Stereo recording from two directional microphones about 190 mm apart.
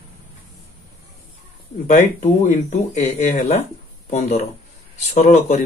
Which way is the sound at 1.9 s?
40° left (ahead or behind).